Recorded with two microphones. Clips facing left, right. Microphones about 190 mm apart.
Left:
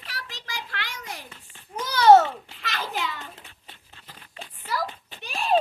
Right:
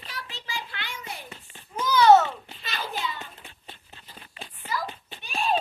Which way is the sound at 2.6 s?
90° left.